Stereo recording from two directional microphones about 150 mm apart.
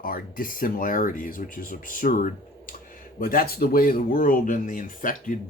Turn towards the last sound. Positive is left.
turn(degrees=65)  # may be behind; listen again after turning